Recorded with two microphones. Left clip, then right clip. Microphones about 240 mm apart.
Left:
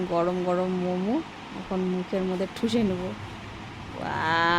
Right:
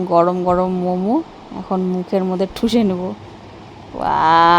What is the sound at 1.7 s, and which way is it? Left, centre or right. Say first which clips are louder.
Speech: right 9 dB; right.